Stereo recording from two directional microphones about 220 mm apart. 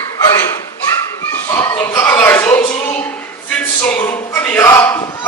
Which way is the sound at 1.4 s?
10° left (ahead or behind).